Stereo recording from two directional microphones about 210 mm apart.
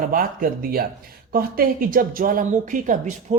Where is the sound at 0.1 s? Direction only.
45° right (ahead or behind).